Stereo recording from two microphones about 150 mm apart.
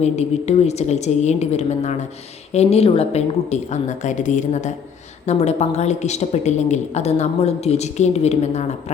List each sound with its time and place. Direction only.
0.0 s a woman's voice: 45° left (ahead or behind)